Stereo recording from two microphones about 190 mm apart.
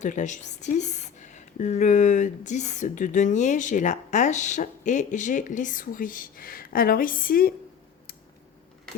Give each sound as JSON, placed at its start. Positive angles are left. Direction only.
{"t": 0.0, "sound": "speech", "side_deg": 40}